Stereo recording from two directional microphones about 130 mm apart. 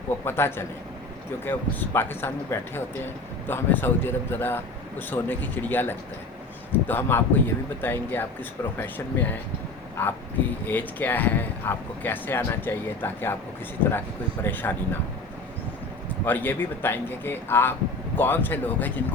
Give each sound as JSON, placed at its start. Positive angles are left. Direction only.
{"t": 0.3, "sound": "speech", "side_deg": 20}
{"t": 14.4, "sound": "speech", "side_deg": 15}
{"t": 16.2, "sound": "speech", "side_deg": 15}